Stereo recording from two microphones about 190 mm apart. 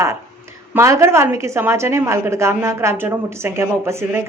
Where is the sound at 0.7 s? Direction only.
15° right (ahead or behind).